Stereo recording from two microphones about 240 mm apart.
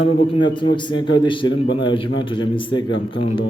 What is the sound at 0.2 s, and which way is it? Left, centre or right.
A man's voice, centre.